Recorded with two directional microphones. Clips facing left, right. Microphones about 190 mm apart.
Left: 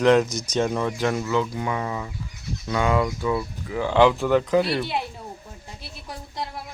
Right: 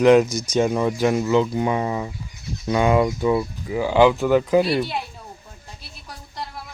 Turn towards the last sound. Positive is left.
turn(degrees=20)  # may be behind; listen again after turning